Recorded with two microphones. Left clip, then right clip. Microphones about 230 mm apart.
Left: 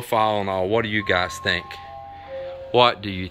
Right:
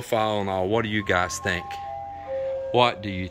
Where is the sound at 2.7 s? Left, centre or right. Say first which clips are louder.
Left 5 dB; centre.